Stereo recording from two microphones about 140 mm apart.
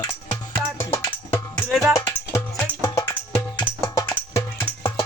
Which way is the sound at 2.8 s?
25° left (ahead or behind).